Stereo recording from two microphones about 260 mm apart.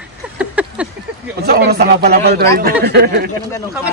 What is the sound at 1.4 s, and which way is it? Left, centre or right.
Speech, right.